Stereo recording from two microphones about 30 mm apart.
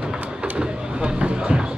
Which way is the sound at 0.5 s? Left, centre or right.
Right.